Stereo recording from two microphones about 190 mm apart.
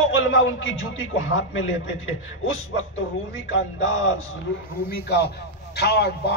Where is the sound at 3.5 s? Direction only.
90° left.